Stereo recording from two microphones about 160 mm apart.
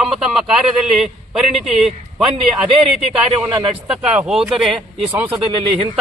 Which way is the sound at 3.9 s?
5° right (ahead or behind).